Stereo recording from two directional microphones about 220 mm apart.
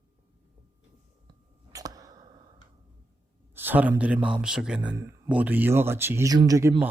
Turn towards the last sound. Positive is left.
turn(degrees=-15)  # may be behind; listen again after turning